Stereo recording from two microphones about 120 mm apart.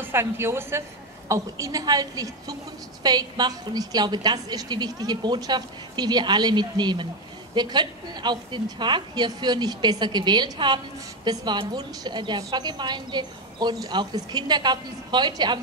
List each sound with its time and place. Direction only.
0.0 s a woman's voice: 20° right (ahead or behind); by 15.6 s 35° right (ahead or behind)